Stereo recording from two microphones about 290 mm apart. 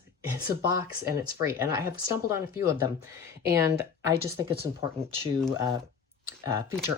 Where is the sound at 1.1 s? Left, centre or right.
Centre.